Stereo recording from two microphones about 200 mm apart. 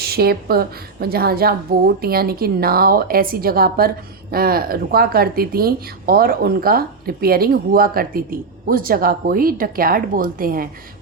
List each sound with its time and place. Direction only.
0.0 s a woman's voice: 50° right (ahead or behind)